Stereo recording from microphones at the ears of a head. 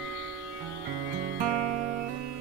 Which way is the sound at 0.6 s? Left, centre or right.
Right.